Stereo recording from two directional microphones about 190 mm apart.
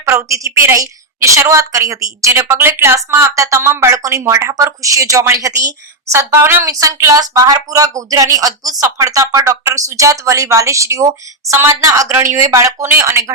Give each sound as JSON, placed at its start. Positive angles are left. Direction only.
{"t": 0.1, "sound": "a woman's voice", "side_deg": -15}